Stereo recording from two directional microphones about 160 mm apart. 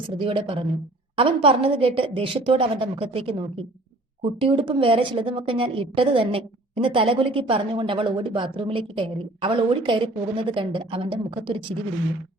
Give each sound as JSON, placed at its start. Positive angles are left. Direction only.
{"t": 0.2, "sound": "a woman's voice", "side_deg": -35}